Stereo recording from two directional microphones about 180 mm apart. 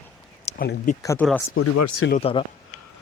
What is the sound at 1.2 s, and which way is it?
Speech, 5° left (ahead or behind).